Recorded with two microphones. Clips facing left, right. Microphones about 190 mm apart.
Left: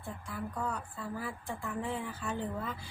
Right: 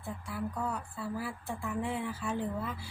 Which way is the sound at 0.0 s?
5° right (ahead or behind).